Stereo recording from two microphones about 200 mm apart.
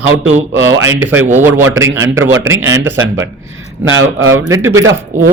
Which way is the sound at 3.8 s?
80° right.